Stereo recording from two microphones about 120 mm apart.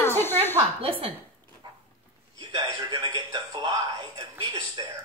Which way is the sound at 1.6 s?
35° right (ahead or behind).